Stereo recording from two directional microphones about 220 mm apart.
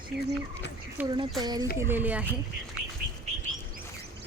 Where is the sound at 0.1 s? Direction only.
50° right (ahead or behind).